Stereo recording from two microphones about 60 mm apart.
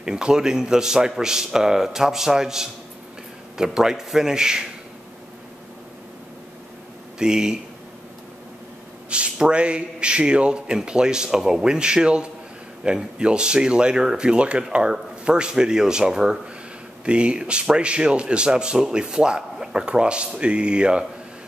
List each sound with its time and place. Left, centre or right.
0.0 s speech: centre
7.2 s speech: centre
9.1 s speech: centre